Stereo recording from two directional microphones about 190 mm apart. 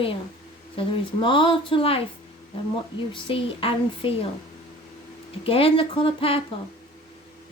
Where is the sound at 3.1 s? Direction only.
25° left (ahead or behind).